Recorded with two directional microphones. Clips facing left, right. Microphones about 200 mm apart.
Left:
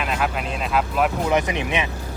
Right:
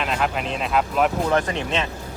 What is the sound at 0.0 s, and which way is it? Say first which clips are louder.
Speech: right 1 dB; 5° left (ahead or behind).